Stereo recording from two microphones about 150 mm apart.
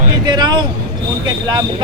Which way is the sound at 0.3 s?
30° right (ahead or behind).